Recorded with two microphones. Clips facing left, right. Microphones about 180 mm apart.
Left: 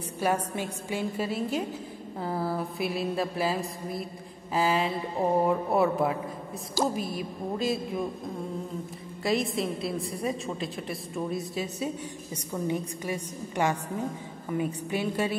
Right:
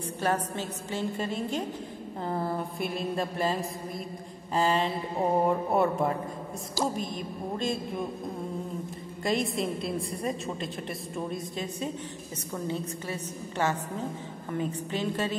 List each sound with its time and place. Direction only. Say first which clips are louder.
0.2 s a woman's voice: left 2 dB; 10° left (ahead or behind)
9.2 s a woman's voice: left 1 dB; centre (ahead or behind)